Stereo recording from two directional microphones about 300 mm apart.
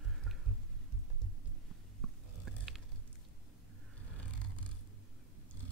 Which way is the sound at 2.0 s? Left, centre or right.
Centre.